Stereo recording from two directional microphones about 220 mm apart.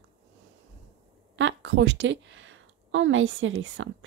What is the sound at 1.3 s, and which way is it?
A woman's voice, 55° right (ahead or behind).